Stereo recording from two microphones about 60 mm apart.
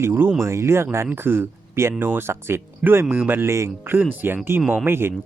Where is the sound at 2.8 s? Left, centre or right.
Centre.